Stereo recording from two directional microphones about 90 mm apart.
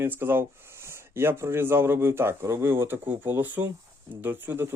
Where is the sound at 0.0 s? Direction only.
25° right (ahead or behind).